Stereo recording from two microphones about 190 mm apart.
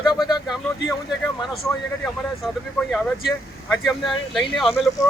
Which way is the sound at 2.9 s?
Centre (ahead or behind).